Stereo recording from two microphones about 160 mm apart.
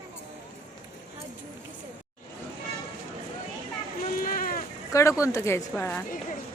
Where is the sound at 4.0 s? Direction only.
60° left (ahead or behind).